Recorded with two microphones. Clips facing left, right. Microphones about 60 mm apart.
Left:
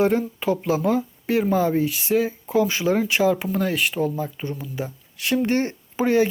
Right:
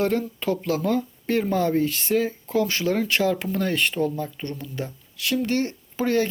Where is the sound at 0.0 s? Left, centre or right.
Centre.